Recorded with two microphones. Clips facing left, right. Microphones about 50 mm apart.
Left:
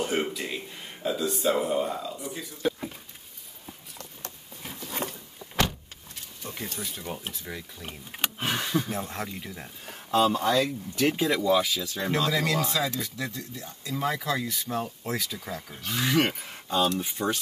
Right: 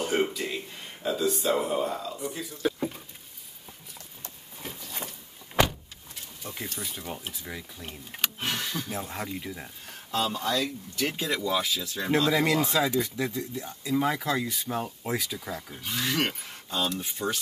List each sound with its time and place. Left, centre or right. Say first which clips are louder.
0.0 s speech: right 1 dB; centre
6.4 s speech: left 1 dB; centre
8.9 s speech: left 1 dB; centre
9.8 s speech: left 6 dB; centre
12.3 s speech: right 2 dB; centre